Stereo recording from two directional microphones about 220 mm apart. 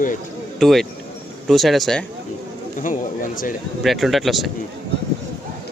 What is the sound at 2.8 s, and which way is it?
Speech, 35° left (ahead or behind).